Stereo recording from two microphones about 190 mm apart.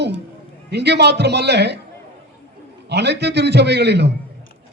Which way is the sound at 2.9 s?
60° right (ahead or behind).